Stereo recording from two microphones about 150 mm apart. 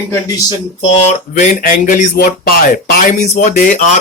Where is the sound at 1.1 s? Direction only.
55° left (ahead or behind).